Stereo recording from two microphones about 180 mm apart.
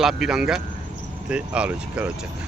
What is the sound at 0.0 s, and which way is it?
Speech, centre (ahead or behind).